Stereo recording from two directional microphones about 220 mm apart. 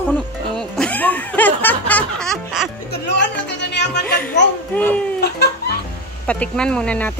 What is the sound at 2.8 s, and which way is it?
Music, 50° left (ahead or behind).